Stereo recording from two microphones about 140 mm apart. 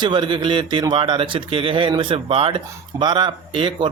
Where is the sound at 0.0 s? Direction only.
35° right (ahead or behind).